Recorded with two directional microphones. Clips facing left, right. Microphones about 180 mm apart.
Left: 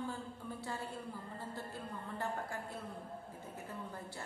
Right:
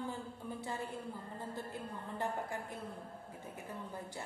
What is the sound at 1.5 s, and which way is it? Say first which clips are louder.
Speech: right 2 dB; 20° right (ahead or behind).